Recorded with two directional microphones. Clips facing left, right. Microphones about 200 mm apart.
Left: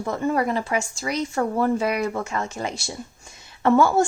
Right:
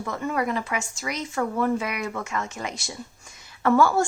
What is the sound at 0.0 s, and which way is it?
A woman's voice, 30° left (ahead or behind).